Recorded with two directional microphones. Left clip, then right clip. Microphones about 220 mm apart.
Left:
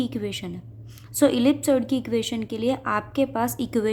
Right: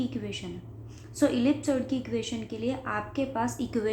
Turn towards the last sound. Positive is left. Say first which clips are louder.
# left 5 dB
turn(degrees=40)  # may be behind; listen again after turning